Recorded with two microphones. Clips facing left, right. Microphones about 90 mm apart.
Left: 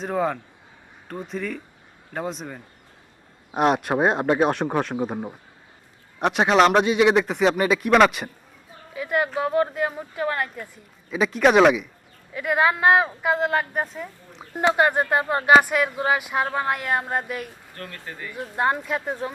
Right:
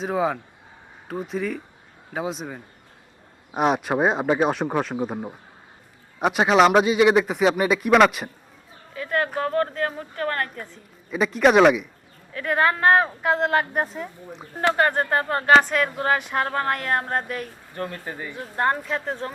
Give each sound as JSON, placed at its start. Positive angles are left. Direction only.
{"t": 0.0, "sound": "speech", "side_deg": -5}
{"t": 8.9, "sound": "speech", "side_deg": 10}
{"t": 11.1, "sound": "speech", "side_deg": 0}
{"t": 14.6, "sound": "speech", "side_deg": 10}
{"t": 17.7, "sound": "speech", "side_deg": -20}
{"t": 18.3, "sound": "speech", "side_deg": 5}